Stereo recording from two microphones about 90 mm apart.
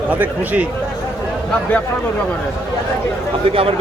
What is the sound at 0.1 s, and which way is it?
Speech, 15° right (ahead or behind).